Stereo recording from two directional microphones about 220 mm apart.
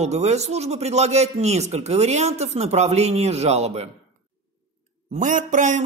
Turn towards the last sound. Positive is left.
turn(degrees=-35)  # may be behind; listen again after turning